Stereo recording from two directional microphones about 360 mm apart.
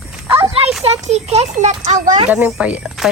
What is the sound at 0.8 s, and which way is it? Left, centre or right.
Speech, centre.